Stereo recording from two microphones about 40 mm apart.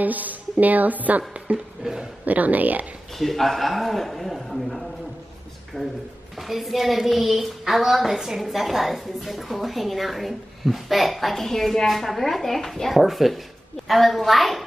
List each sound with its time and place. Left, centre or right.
0.0 s a woman's voice: right
1.8 s speech: right
2.2 s a woman's voice: right
3.1 s a woman's voice: centre
5.7 s speech: centre
6.3 s a woman's voice: centre
12.9 s a woman's voice: centre